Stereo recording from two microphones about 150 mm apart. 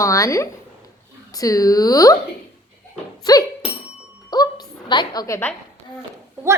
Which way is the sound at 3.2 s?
25° left (ahead or behind).